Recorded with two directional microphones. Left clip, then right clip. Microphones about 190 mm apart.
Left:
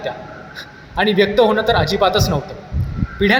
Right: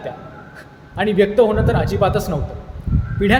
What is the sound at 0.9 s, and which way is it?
A man's voice, 15° right (ahead or behind).